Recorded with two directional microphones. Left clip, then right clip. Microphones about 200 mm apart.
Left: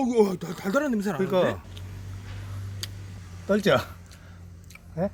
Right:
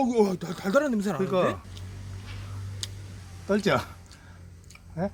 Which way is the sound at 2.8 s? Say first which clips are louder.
Even; 5° right (ahead or behind).